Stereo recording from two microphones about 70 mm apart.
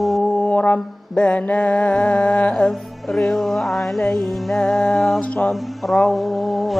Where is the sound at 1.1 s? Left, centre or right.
Centre.